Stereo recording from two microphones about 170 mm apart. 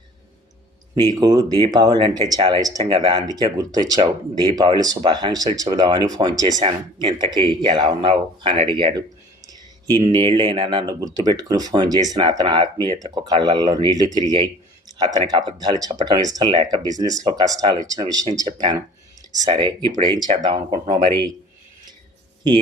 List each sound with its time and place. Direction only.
0.9 s speech: 20° right (ahead or behind)
19.3 s speech: 25° right (ahead or behind)